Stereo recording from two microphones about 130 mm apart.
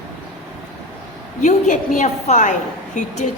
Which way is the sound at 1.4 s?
65° left (ahead or behind).